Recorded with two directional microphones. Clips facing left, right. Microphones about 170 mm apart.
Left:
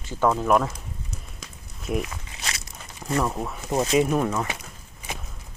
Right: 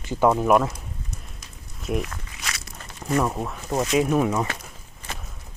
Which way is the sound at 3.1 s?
5° right (ahead or behind).